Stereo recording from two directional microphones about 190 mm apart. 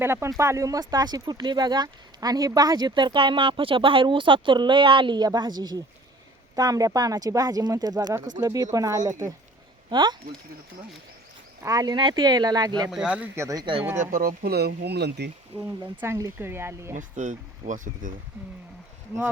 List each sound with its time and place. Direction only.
0.0 s speech: 15° right (ahead or behind)
11.6 s speech: 20° right (ahead or behind)
12.9 s speech: 5° right (ahead or behind); by 13.8 s 25° right (ahead or behind)
13.9 s speech: 45° right (ahead or behind)
16.0 s speech: 15° right (ahead or behind)
17.0 s speech: 40° right (ahead or behind)
18.3 s speech: 10° right (ahead or behind)